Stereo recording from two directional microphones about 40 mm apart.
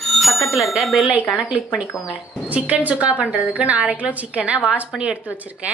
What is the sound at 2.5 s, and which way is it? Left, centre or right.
Speech, right.